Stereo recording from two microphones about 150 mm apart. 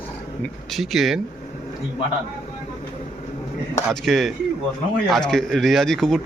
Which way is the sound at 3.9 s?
Centre (ahead or behind).